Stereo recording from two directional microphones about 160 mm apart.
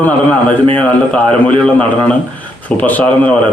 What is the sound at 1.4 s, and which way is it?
A man's voice, 10° left (ahead or behind).